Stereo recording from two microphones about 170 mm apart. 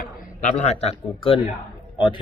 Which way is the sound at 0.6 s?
35° left (ahead or behind).